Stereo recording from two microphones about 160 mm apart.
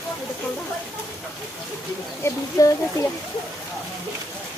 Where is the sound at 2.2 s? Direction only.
20° left (ahead or behind).